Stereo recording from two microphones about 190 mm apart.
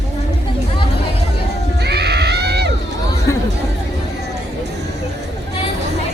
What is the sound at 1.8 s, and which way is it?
Children shouting, 60° right (ahead or behind).